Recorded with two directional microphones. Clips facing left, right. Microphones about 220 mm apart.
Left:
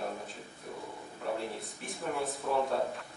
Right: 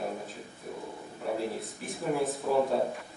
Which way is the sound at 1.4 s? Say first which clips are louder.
Right 5 dB; centre (ahead or behind).